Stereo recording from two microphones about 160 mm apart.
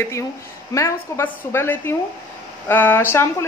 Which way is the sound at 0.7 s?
20° left (ahead or behind).